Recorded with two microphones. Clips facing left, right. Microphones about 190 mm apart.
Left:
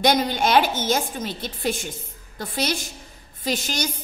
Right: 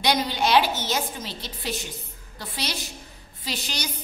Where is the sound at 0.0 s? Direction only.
50° left (ahead or behind).